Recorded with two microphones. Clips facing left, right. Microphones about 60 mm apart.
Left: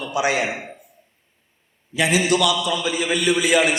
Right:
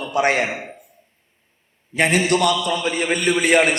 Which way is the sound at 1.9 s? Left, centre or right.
Right.